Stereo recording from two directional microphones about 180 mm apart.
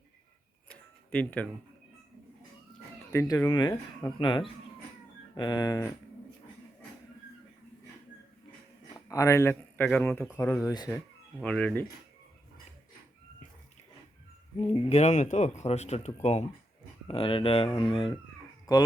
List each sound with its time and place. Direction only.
0.7 s a sound: 10° left (ahead or behind)
3.1 s speech: 15° left (ahead or behind)
9.0 s speech: 15° left (ahead or behind)
11.3 s speech: 5° left (ahead or behind)
14.6 s speech: 35° left (ahead or behind)